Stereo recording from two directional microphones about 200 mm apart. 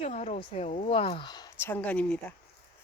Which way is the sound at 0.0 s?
35° left (ahead or behind).